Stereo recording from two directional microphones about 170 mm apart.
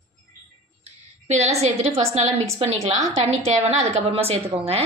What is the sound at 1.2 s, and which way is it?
A woman's voice, 40° right (ahead or behind).